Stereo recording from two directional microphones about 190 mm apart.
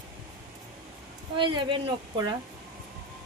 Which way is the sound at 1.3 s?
25° right (ahead or behind).